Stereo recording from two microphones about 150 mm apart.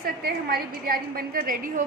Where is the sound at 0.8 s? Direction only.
75° right (ahead or behind).